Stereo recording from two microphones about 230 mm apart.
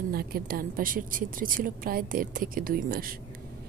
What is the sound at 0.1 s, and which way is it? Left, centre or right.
A woman's voice, right.